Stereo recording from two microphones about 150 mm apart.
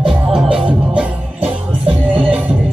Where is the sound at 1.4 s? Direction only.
40° right (ahead or behind).